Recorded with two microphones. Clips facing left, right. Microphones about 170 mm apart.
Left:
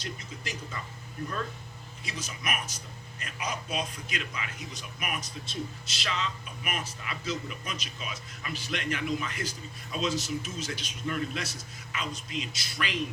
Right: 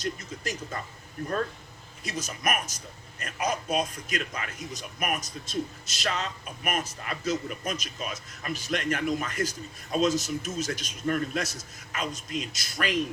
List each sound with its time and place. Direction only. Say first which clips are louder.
0.0 s speech: right 6 dB; 45° right (ahead or behind)
2.0 s speech: right 6 dB; 45° right (ahead or behind)